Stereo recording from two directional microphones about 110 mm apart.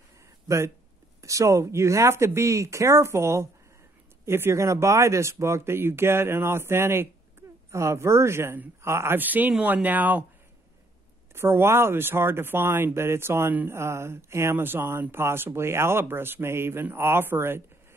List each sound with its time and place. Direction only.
1.2 s speech: 30° right (ahead or behind)
11.3 s speech: 25° right (ahead or behind)